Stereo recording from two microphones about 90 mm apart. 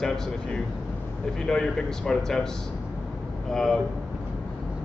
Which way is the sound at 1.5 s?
5° left (ahead or behind).